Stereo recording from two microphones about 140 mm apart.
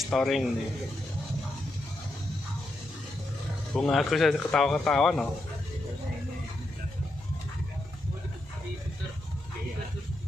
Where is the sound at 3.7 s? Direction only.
5° left (ahead or behind).